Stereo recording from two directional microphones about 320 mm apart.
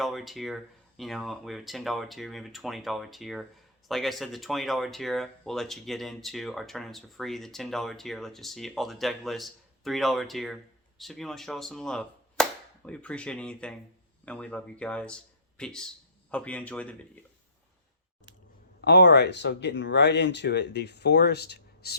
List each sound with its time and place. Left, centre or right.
0.0 s speech: centre
18.9 s speech: left